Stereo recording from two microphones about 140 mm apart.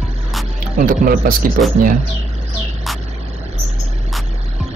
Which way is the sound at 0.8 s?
85° right.